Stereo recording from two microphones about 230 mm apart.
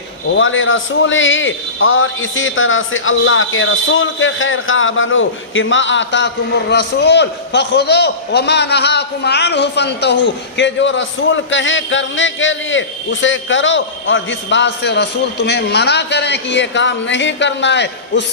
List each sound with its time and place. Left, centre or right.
0.3 s a man's voice: left